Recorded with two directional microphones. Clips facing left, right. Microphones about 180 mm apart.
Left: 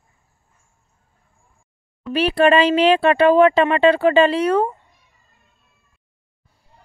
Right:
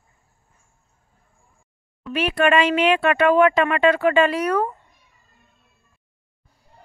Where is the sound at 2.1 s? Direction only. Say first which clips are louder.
Left 4 dB; 30° left (ahead or behind).